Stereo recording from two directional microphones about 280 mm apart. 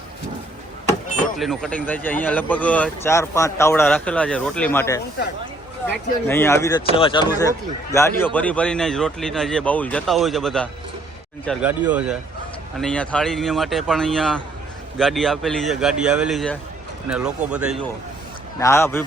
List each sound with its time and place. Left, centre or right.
1.4 s speech: centre
6.2 s speech: centre
18.6 s speech: centre